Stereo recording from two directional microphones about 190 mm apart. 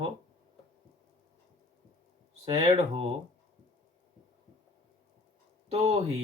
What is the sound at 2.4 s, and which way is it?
Speech, 30° right (ahead or behind).